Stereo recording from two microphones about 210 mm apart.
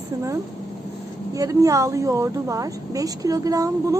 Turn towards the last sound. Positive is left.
turn(degrees=-15)  # may be behind; listen again after turning